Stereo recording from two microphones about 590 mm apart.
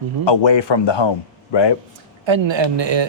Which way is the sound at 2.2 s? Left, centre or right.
Right.